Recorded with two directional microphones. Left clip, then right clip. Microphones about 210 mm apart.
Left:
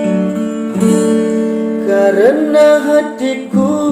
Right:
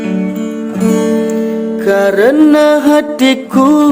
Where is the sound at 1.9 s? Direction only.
45° right (ahead or behind).